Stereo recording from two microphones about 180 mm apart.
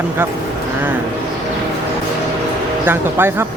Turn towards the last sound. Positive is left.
turn(degrees=-10)  # may be behind; listen again after turning